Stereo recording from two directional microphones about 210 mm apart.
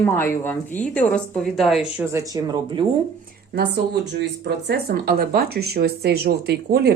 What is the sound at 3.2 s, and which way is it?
Speech, 55° right (ahead or behind).